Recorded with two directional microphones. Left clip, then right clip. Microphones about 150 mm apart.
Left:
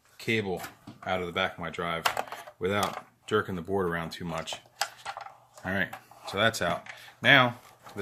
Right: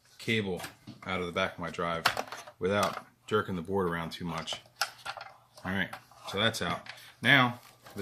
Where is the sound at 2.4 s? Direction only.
50° left (ahead or behind).